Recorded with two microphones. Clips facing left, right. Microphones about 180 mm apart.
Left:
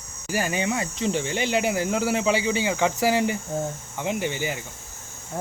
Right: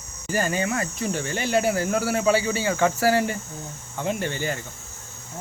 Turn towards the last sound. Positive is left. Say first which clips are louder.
# even
turn(degrees=15)  # may be behind; listen again after turning